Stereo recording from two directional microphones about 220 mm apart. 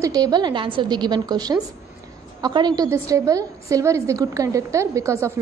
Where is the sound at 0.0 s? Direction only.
15° right (ahead or behind).